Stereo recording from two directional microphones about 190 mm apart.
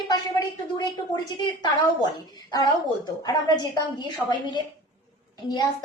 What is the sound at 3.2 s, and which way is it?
A woman's voice, 20° left (ahead or behind).